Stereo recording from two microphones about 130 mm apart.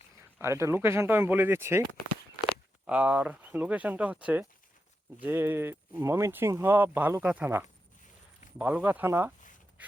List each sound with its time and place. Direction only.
0.3 s speech: 20° right (ahead or behind)
2.8 s speech: 10° right (ahead or behind)